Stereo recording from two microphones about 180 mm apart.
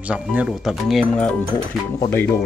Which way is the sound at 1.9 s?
15° left (ahead or behind).